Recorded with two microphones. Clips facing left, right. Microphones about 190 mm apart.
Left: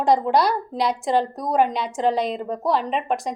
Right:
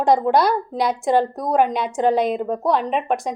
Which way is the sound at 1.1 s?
50° right (ahead or behind).